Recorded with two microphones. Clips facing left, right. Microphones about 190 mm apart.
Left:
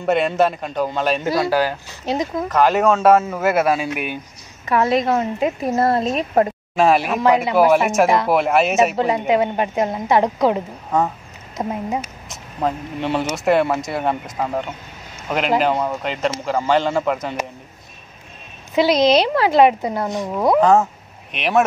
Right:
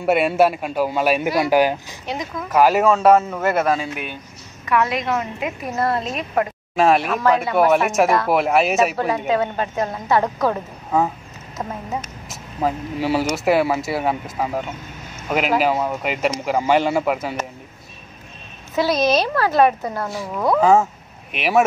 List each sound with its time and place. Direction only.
0.0 s speech: 10° right (ahead or behind)
2.0 s a woman's voice: 30° left (ahead or behind)
2.5 s speech: 5° right (ahead or behind); by 4.2 s 10° left (ahead or behind)
4.6 s a woman's voice: 30° left (ahead or behind)
6.7 s speech: centre (ahead or behind)
7.2 s a woman's voice: 15° left (ahead or behind)
7.5 s speech: centre (ahead or behind)
8.9 s a woman's voice: 20° left (ahead or behind)
12.3 s speech: 5° right (ahead or behind)
18.8 s a woman's voice: 15° left (ahead or behind)
20.6 s speech: 5° right (ahead or behind)